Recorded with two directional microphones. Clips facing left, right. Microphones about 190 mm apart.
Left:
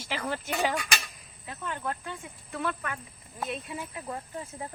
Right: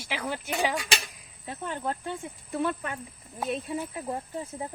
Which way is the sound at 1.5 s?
30° right (ahead or behind).